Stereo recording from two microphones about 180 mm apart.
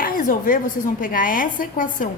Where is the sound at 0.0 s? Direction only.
50° left (ahead or behind).